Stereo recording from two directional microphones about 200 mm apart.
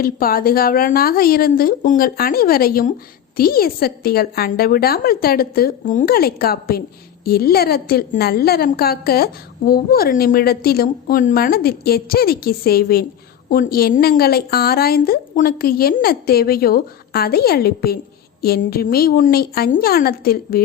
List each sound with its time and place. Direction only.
0.0 s a woman's voice: 45° left (ahead or behind)